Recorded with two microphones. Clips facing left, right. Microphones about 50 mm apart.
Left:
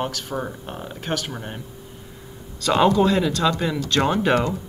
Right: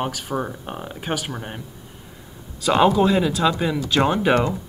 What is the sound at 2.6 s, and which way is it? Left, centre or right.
Speech, centre.